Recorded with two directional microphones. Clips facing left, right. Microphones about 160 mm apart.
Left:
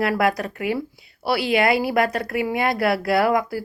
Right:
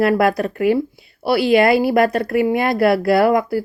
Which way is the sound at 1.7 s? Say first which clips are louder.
Right 5 dB; 25° right (ahead or behind).